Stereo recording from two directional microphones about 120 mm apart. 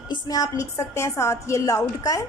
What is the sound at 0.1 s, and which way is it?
A woman's voice, 30° left (ahead or behind).